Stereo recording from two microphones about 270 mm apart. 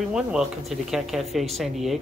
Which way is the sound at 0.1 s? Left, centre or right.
Centre.